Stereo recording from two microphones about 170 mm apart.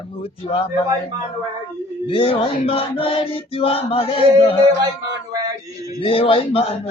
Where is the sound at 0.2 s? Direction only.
35° left (ahead or behind).